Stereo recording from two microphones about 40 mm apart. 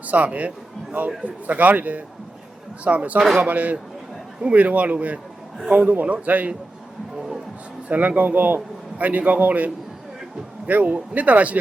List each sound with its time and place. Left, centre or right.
0.1 s a man's voice: right
7.9 s a man's voice: right